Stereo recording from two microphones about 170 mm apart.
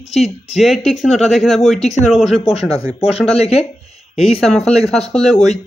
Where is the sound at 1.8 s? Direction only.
40° left (ahead or behind).